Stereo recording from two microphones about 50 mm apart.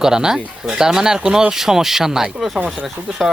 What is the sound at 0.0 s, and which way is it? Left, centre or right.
Speech, centre.